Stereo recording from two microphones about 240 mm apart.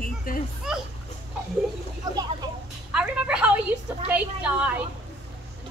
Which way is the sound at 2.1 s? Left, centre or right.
Centre.